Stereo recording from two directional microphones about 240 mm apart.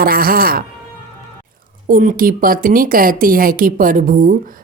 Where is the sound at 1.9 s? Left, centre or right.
Right.